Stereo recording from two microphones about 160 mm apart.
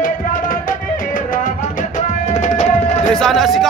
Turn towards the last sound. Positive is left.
turn(degrees=0)  # may be behind; listen again after turning